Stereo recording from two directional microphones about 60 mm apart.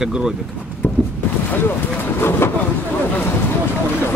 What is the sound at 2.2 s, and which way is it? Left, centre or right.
Vehicle, left.